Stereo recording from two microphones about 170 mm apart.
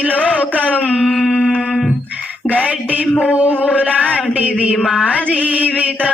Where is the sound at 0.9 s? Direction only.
5° right (ahead or behind).